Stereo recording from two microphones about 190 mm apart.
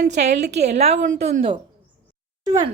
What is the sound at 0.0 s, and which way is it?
A woman's voice, 35° right (ahead or behind).